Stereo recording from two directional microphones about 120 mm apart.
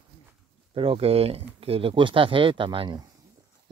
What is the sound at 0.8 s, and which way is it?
Speech, 55° right (ahead or behind).